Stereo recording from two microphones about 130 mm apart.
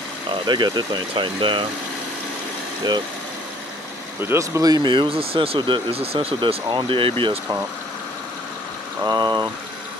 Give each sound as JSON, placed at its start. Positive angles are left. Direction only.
{"t": 0.3, "sound": "speech", "side_deg": -35}
{"t": 4.2, "sound": "speech", "side_deg": -20}
{"t": 9.0, "sound": "speech", "side_deg": -30}